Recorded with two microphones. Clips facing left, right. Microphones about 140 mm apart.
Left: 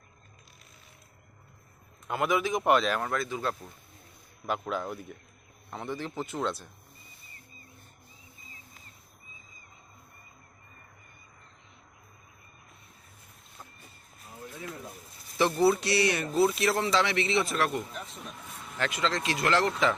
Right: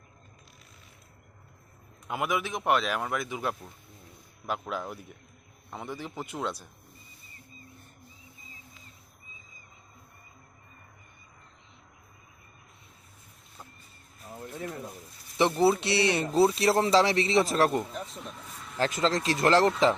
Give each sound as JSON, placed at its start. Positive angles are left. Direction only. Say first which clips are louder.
{"t": 2.0, "sound": "speech", "louder": "left 3 dB", "side_deg": -10}
{"t": 4.4, "sound": "speech", "louder": "left 2 dB", "side_deg": 0}
{"t": 15.4, "sound": "speech", "louder": "right 1 dB", "side_deg": -20}
{"t": 18.1, "sound": "vehicle", "louder": "right 1 dB", "side_deg": 10}
{"t": 18.8, "sound": "speech", "louder": "right 3 dB", "side_deg": -40}